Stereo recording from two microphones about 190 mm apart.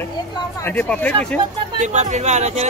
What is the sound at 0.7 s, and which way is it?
Speech, 10° left (ahead or behind).